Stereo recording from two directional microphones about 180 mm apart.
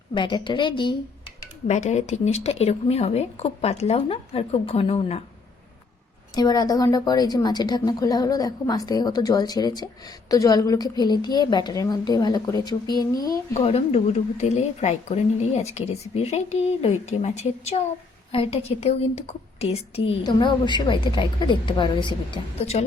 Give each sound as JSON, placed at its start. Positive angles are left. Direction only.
{"t": 0.1, "sound": "a woman's voice", "side_deg": 25}
{"t": 1.6, "sound": "a woman's voice", "side_deg": 40}
{"t": 6.3, "sound": "a woman's voice", "side_deg": 20}
{"t": 13.6, "sound": "a woman's voice", "side_deg": 35}